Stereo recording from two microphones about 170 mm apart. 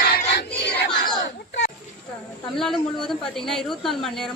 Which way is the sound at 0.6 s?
90° left.